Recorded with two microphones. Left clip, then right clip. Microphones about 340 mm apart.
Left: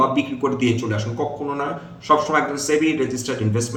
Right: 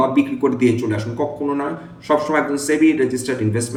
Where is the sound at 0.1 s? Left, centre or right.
Centre.